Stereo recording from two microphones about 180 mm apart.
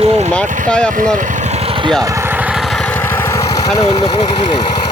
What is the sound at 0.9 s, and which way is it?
Speech, 45° right (ahead or behind).